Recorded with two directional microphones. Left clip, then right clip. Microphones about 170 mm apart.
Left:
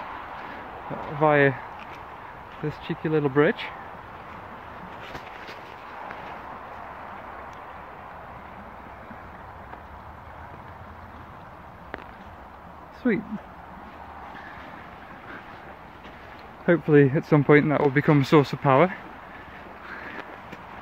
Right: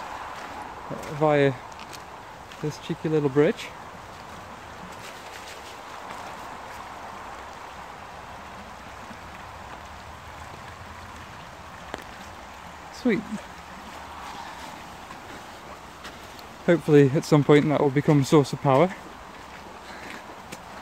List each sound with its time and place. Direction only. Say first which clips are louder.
1.2 s speech: left 2 dB; 10° right (ahead or behind)
2.9 s speech: even; 15° right (ahead or behind)
13.0 s speech: even; 15° right (ahead or behind)
16.6 s speech: even; 20° right (ahead or behind)